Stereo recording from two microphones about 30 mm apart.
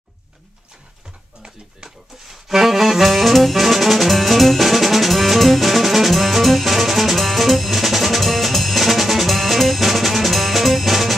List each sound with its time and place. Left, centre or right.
2.2 s saxophone: centre
7.2 s music: centre